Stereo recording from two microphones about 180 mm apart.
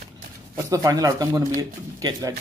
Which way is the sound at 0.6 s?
20° right (ahead or behind).